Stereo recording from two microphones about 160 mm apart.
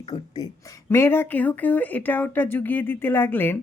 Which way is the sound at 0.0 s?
25° left (ahead or behind).